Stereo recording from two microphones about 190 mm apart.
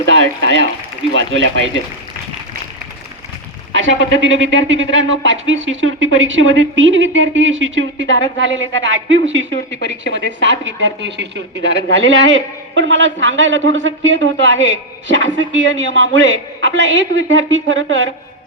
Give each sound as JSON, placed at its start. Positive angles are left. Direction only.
{"t": 0.0, "sound": "speech", "side_deg": -70}
{"t": 3.7, "sound": "speech", "side_deg": -75}